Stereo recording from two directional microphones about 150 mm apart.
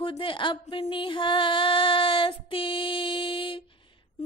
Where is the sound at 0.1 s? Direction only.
35° left (ahead or behind).